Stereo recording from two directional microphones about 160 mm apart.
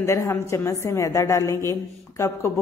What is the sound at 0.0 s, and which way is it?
A woman's voice, 20° left (ahead or behind).